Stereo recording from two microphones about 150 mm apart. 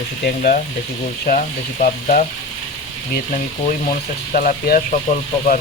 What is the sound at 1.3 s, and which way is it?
Speech, 60° left (ahead or behind).